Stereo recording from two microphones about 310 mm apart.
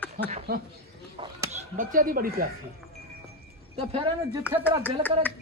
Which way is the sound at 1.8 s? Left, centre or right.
Right.